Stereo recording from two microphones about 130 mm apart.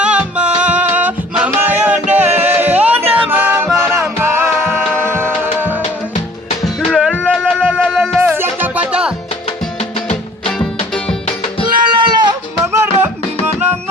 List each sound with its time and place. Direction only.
0.0 s music: 10° right (ahead or behind)
6.7 s music: centre (ahead or behind)
7.1 s music: 10° left (ahead or behind)
8.3 s music: 15° right (ahead or behind)
9.5 s music: 55° left (ahead or behind)
10.4 s music: 5° left (ahead or behind)
12.0 s a sound: 35° right (ahead or behind)
12.8 s music: 15° right (ahead or behind)